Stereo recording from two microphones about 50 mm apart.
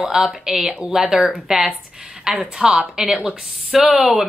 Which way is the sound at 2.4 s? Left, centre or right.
Centre.